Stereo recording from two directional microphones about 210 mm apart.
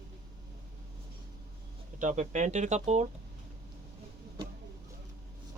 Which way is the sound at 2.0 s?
35° right (ahead or behind).